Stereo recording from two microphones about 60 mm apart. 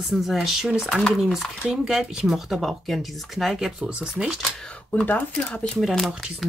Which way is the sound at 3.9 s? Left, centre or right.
Centre.